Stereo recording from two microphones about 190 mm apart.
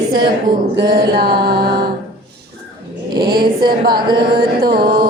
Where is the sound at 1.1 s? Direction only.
55° right (ahead or behind).